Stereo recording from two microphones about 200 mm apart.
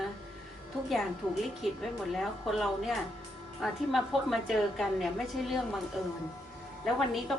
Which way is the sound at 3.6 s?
Centre (ahead or behind).